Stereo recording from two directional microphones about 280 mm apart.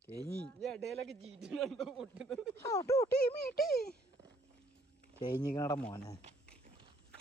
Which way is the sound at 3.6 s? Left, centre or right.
Left.